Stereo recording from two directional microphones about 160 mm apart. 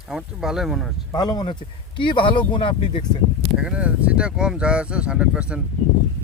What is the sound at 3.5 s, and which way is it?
Speech, 5° right (ahead or behind).